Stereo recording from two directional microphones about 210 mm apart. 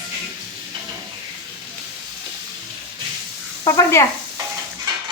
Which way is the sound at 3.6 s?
15° left (ahead or behind).